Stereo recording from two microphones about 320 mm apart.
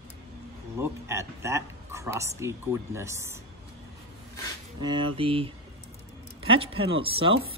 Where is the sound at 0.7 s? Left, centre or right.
Centre.